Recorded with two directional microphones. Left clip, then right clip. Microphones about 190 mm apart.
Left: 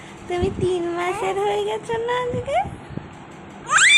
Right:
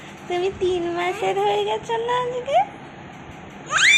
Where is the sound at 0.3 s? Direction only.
5° left (ahead or behind).